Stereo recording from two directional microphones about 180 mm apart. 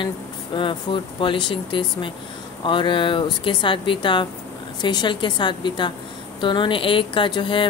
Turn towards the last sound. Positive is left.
turn(degrees=25)  # may be behind; listen again after turning